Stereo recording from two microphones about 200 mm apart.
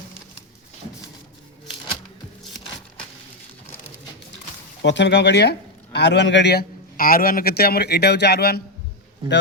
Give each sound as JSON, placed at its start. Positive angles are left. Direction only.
{"t": 4.8, "sound": "speech", "side_deg": 60}
{"t": 9.2, "sound": "a man's voice", "side_deg": -20}